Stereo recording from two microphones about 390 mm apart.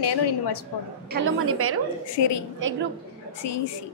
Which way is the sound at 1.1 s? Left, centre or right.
Right.